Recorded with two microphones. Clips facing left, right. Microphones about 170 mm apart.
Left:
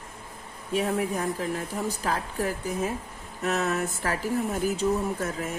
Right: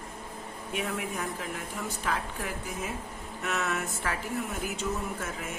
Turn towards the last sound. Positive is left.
turn(degrees=40)  # may be behind; listen again after turning